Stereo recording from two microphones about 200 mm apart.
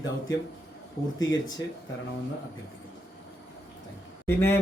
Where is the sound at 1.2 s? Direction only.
20° left (ahead or behind).